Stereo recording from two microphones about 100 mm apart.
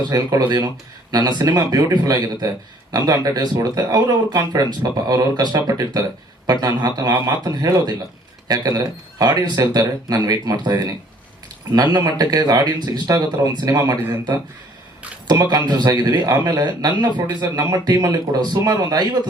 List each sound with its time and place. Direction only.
0.1 s a man's voice: 40° right (ahead or behind)
15.3 s a man's voice: 45° right (ahead or behind)